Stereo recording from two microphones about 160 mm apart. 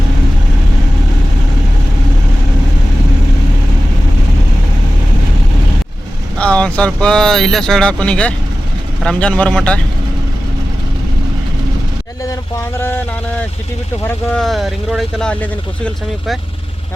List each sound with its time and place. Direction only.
6.4 s speech: 5° left (ahead or behind)
12.2 s speech: 20° left (ahead or behind)
14.3 s speech: centre (ahead or behind)